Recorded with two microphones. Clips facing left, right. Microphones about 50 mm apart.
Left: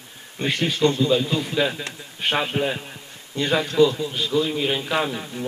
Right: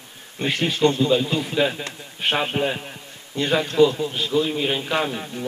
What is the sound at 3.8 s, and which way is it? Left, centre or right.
Speech, right.